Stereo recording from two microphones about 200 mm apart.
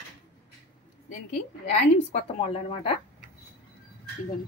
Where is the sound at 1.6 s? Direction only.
35° left (ahead or behind).